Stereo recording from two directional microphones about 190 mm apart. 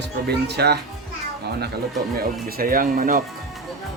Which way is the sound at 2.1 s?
50° right (ahead or behind).